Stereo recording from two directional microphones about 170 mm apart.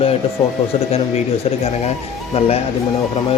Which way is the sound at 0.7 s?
35° left (ahead or behind).